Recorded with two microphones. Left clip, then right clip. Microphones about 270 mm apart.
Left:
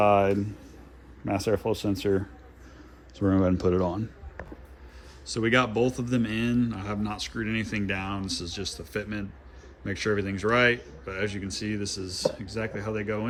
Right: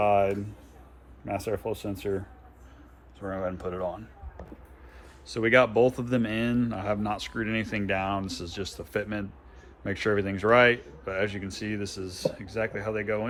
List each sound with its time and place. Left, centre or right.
0.0 s a sound: left
1.2 s speech: left
5.2 s speech: centre